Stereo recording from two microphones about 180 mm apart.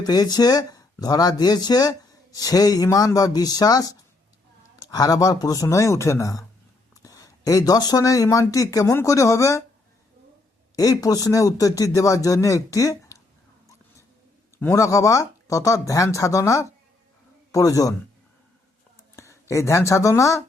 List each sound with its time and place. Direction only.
0.0 s speech: 20° left (ahead or behind)
10.8 s a man's voice: 20° left (ahead or behind)
14.6 s a man's voice: 15° left (ahead or behind)
19.1 s speech: 15° left (ahead or behind)